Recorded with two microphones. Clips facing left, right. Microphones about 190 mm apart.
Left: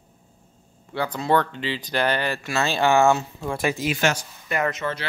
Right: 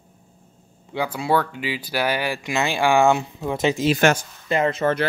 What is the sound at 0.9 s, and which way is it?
Speech, 10° right (ahead or behind).